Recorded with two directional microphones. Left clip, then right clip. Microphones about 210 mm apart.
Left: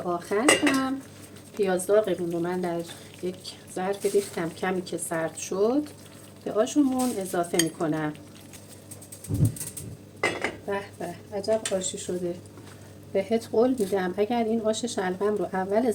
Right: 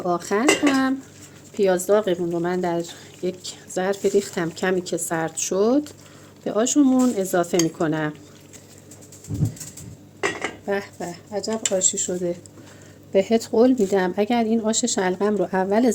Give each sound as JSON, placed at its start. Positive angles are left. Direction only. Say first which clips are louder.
{"t": 0.1, "sound": "speech", "louder": "right 2 dB", "side_deg": -40}
{"t": 10.7, "sound": "speech", "louder": "right 5 dB", "side_deg": -45}
{"t": 13.1, "sound": "speech", "louder": "right 6 dB", "side_deg": -45}